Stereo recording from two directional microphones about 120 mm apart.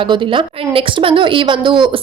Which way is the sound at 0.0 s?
45° right (ahead or behind).